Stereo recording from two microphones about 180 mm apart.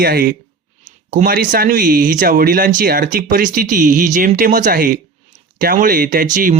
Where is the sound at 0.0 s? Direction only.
60° right (ahead or behind).